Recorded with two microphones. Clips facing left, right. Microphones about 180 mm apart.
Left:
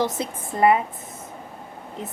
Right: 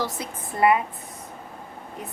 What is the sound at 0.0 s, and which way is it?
Speech, 25° left (ahead or behind).